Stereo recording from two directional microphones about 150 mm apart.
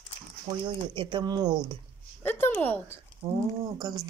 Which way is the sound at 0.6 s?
35° right (ahead or behind).